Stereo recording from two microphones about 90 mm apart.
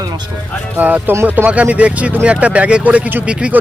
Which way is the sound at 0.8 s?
20° right (ahead or behind).